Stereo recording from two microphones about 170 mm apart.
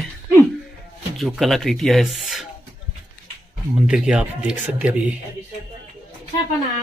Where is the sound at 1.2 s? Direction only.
Centre (ahead or behind).